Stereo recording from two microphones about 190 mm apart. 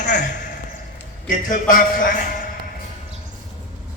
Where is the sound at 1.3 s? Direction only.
45° left (ahead or behind).